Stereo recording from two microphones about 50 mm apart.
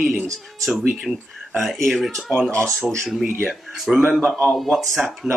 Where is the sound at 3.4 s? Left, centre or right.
Centre.